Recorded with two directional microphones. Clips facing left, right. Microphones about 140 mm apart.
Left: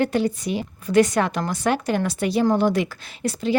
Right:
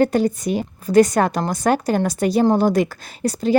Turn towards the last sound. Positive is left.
turn(degrees=-40)  # may be behind; listen again after turning